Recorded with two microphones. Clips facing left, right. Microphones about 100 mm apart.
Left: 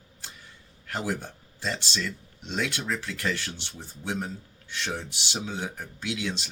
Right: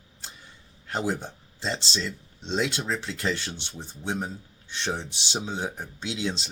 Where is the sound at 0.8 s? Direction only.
25° right (ahead or behind).